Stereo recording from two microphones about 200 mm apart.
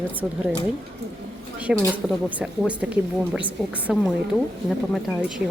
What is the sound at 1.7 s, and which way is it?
Speech, 5° right (ahead or behind).